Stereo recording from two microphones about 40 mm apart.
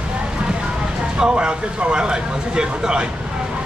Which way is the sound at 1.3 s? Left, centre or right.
Right.